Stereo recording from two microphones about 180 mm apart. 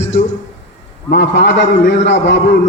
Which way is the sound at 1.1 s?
70° left (ahead or behind).